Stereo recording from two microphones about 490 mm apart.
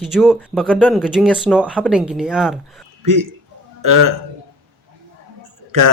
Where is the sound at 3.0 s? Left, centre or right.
Right.